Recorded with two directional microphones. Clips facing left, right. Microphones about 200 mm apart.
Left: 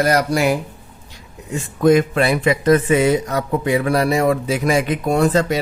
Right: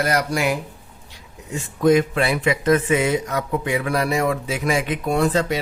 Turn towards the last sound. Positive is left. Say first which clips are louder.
# left 3 dB
turn(degrees=45)  # may be behind; listen again after turning